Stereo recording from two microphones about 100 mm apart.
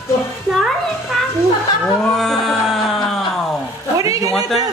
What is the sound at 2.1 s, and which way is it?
Music, 5° left (ahead or behind).